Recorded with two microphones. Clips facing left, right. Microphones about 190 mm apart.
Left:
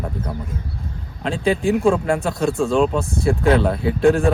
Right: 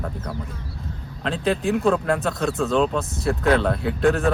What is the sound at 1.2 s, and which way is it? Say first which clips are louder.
Speech: left 3 dB; centre (ahead or behind).